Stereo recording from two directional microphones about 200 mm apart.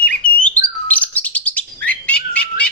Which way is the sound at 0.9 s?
10° left (ahead or behind).